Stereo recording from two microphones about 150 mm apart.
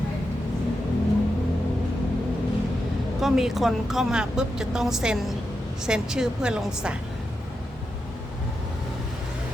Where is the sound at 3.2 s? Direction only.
Centre (ahead or behind).